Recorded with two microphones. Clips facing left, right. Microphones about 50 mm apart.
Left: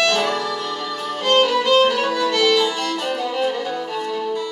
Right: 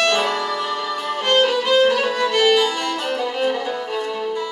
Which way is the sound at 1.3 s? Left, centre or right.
Centre.